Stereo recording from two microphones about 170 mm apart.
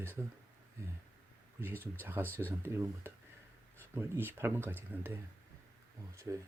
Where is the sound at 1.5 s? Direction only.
10° right (ahead or behind).